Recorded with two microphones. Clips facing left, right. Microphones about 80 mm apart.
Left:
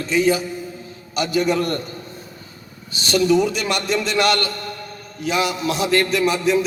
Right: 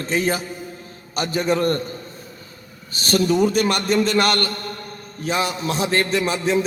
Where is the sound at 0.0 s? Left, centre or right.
Right.